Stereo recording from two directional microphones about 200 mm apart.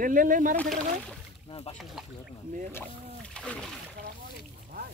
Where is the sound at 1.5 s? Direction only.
30° left (ahead or behind).